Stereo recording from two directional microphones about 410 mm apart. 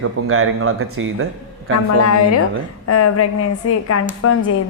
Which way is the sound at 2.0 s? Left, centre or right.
Left.